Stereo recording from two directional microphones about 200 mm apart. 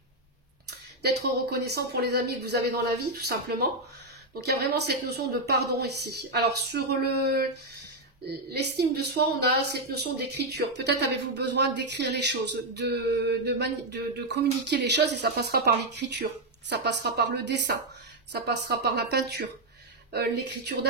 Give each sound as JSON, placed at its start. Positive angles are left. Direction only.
{"t": 0.7, "sound": "speech", "side_deg": -55}